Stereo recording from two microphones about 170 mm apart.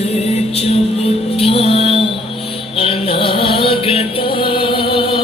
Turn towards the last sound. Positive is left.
turn(degrees=30)  # may be behind; listen again after turning